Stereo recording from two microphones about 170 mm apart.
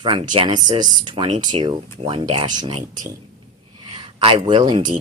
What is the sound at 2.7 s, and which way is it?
Speech, 45° right (ahead or behind).